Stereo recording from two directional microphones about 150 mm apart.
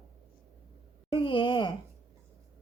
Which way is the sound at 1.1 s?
35° left (ahead or behind).